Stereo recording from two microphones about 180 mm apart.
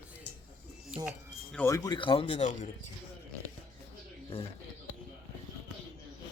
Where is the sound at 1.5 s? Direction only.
15° left (ahead or behind); by 2.6 s 35° left (ahead or behind).